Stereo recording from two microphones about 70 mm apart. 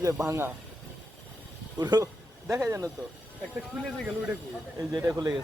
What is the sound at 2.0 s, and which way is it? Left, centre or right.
Speech, right.